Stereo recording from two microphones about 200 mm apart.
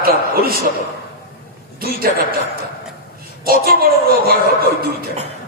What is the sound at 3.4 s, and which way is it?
Speech, 50° right (ahead or behind).